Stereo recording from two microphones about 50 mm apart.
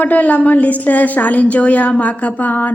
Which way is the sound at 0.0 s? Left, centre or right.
Left.